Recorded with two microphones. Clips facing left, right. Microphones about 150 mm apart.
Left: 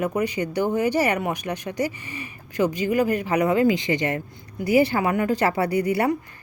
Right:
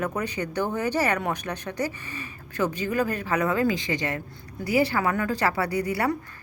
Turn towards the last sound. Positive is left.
turn(degrees=20)  # may be behind; listen again after turning